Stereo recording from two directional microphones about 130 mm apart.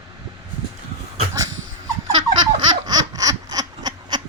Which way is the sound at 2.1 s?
35° right (ahead or behind).